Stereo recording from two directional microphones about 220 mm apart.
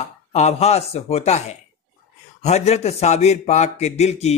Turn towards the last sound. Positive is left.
turn(degrees=30)  # may be behind; listen again after turning